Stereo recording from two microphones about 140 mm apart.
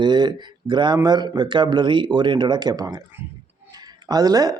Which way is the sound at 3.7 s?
30° right (ahead or behind).